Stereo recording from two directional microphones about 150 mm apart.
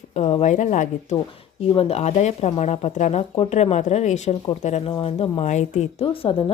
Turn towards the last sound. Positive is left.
turn(degrees=35)  # may be behind; listen again after turning